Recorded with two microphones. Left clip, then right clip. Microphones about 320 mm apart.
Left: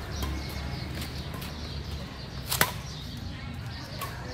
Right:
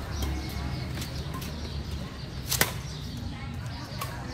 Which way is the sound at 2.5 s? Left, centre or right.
Centre.